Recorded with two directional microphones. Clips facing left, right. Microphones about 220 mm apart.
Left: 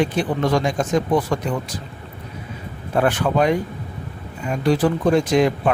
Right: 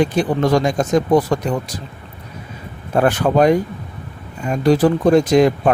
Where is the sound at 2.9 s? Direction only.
40° right (ahead or behind).